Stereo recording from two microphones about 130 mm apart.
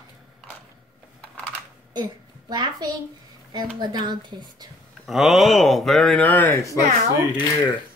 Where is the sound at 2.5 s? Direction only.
30° right (ahead or behind).